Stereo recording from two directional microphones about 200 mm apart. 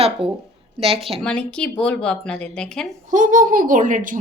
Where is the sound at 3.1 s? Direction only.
40° right (ahead or behind).